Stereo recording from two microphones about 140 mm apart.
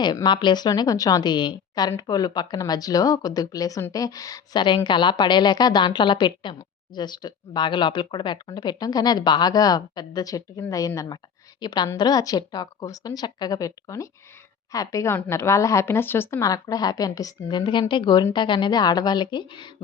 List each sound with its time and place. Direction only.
0.0 s a woman's voice: 30° left (ahead or behind)